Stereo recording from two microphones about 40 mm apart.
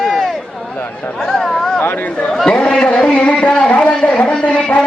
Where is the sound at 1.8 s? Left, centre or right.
Left.